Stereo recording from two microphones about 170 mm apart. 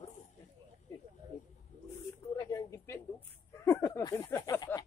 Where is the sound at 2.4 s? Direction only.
20° left (ahead or behind).